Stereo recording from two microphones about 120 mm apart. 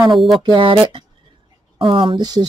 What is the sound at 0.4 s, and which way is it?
Speech, 40° right (ahead or behind).